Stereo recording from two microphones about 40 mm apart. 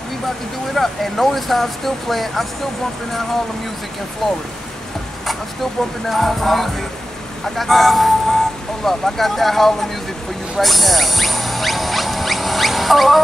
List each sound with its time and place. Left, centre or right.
0.7 s speech: centre
5.2 s speech: centre
10.6 s a sound: centre